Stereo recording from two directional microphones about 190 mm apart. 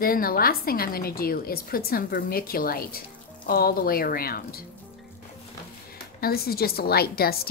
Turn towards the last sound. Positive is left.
turn(degrees=55)  # may be behind; listen again after turning